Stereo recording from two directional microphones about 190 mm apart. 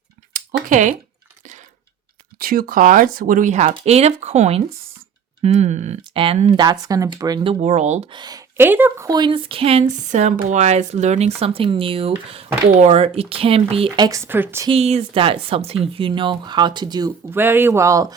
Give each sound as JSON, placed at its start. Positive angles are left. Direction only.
{"t": 0.3, "sound": "a sound", "side_deg": -45}
{"t": 0.7, "sound": "speech", "side_deg": -40}
{"t": 2.4, "sound": "speech", "side_deg": -50}
{"t": 7.6, "sound": "speech", "side_deg": -35}
{"t": 8.1, "sound": "speech", "side_deg": -20}
{"t": 14.7, "sound": "speech", "side_deg": -35}